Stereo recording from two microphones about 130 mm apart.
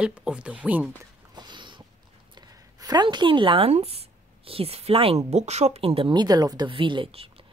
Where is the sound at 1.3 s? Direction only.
35° right (ahead or behind).